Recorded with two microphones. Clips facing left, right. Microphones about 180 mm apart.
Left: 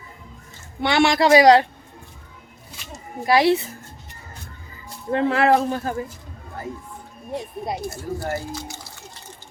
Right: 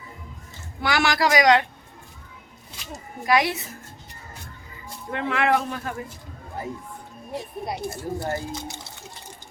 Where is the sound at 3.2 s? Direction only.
30° left (ahead or behind).